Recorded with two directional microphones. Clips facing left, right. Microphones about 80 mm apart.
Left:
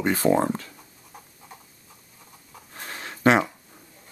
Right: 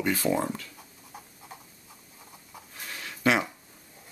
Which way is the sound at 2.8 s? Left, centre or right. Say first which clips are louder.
Left 4 dB; left.